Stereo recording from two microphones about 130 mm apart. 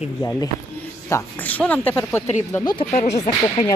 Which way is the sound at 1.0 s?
15° left (ahead or behind).